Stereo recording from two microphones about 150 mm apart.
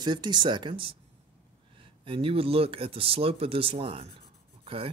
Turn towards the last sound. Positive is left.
turn(degrees=-35)  # may be behind; listen again after turning